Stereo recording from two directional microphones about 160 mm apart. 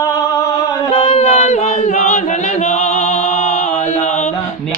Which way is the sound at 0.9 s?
40° left (ahead or behind).